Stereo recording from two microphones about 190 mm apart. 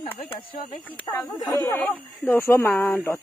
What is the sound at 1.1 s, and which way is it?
Speech, 20° left (ahead or behind).